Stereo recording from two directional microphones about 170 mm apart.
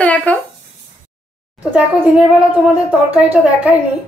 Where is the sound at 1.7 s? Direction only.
5° right (ahead or behind).